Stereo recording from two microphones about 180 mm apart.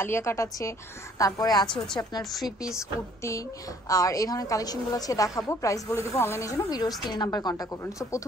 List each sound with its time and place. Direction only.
0.0 s a woman's voice: 15° left (ahead or behind)
3.9 s a woman's voice: 20° left (ahead or behind)